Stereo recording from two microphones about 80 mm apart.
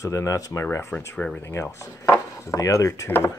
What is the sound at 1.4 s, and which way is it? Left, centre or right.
Speech, left.